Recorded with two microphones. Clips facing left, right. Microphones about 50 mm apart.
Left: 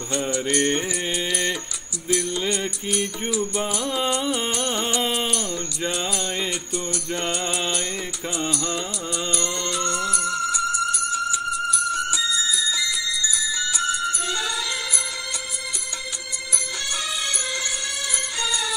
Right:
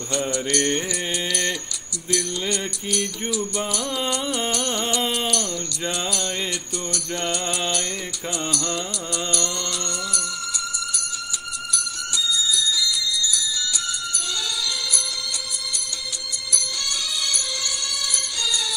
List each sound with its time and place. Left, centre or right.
0.3 s mantra: centre
2.1 s music: centre
6.9 s music: centre